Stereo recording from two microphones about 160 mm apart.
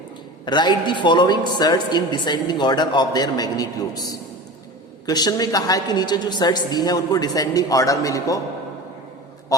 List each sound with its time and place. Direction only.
0.4 s a woman's voice: 25° left (ahead or behind)